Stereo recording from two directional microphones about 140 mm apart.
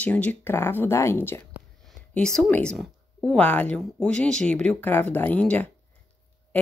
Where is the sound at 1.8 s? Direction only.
5° left (ahead or behind).